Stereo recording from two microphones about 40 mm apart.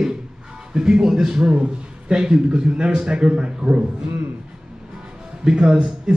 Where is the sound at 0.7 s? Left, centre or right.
Centre.